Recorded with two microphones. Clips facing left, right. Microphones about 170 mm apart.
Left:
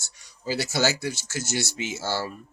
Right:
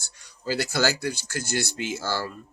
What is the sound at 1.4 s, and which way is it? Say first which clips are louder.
Speech: right 1 dB; 20° left (ahead or behind).